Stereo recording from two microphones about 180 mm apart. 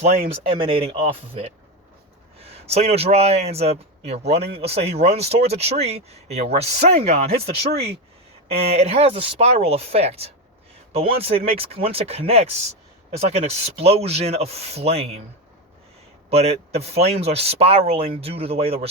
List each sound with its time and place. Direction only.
0.4 s a man's voice: 30° right (ahead or behind)
8.4 s a man's voice: 35° right (ahead or behind)
16.3 s a man's voice: 35° right (ahead or behind)